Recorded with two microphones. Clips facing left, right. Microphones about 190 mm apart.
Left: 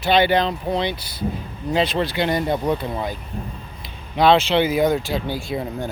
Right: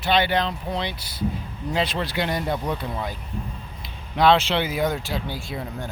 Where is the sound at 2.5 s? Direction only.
20° left (ahead or behind).